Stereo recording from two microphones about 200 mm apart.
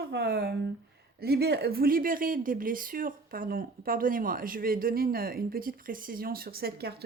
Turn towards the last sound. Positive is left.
turn(degrees=-50)  # may be behind; listen again after turning